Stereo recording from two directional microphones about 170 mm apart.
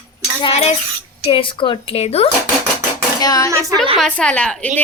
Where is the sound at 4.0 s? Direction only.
5° left (ahead or behind).